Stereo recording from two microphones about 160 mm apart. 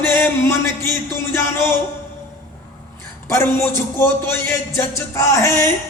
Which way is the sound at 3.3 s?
15° left (ahead or behind).